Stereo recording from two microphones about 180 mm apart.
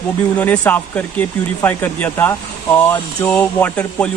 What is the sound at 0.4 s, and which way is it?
Speech, 10° left (ahead or behind).